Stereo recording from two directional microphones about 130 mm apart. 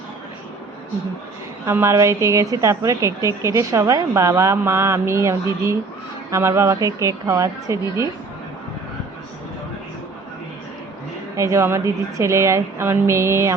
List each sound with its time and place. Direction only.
1.6 s a woman's voice: 20° right (ahead or behind)
11.3 s a woman's voice: 25° right (ahead or behind)